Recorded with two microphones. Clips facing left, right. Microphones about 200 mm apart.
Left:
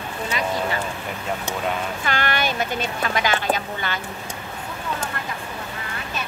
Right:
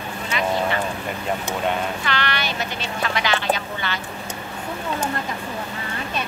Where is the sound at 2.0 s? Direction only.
45° left (ahead or behind).